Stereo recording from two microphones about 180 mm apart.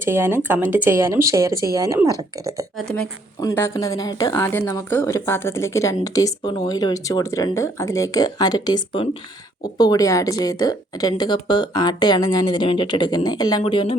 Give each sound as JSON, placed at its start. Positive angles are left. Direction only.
{"t": 0.0, "sound": "speech", "side_deg": -10}
{"t": 2.7, "sound": "speech", "side_deg": 5}
{"t": 3.4, "sound": "a woman's voice", "side_deg": 15}